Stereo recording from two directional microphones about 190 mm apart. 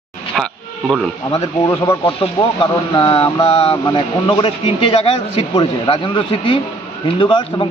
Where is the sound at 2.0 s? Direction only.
30° left (ahead or behind).